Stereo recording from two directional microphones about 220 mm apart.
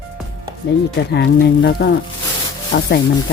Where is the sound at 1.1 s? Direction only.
50° left (ahead or behind).